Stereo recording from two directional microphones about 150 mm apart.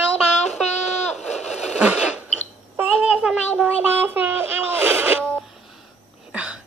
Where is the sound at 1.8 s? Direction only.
10° right (ahead or behind).